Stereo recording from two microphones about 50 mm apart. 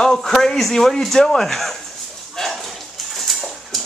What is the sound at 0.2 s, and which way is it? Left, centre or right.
A man's voice, centre.